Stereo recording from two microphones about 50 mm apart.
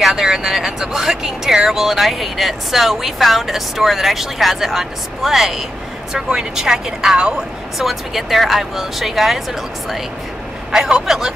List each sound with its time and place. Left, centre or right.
0.1 s speech: centre
7.8 s speech: centre
10.7 s speech: centre